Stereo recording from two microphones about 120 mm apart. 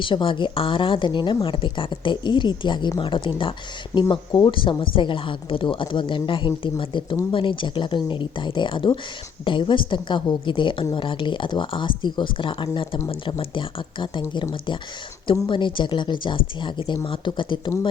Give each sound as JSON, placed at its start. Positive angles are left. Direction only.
{"t": 0.0, "sound": "speech", "side_deg": 45}
{"t": 15.4, "sound": "speech", "side_deg": 40}